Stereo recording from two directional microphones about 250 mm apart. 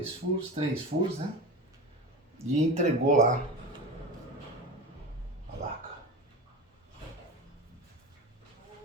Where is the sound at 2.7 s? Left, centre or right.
Right.